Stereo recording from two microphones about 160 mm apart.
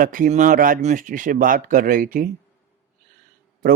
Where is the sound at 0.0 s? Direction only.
55° right (ahead or behind).